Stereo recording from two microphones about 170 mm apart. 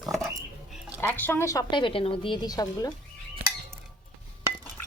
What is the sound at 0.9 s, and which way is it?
A woman's voice, 10° left (ahead or behind).